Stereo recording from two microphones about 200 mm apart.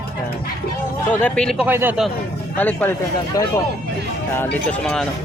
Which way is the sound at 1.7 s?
10° right (ahead or behind).